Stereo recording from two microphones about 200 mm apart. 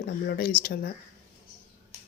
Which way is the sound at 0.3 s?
50° left (ahead or behind).